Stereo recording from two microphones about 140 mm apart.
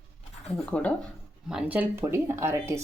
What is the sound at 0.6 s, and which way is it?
Speech, 10° left (ahead or behind).